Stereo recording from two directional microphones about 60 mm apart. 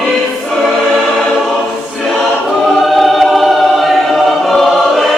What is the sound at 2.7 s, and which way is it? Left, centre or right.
Choir, centre.